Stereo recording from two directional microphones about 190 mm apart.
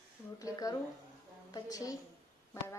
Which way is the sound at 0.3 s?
20° left (ahead or behind).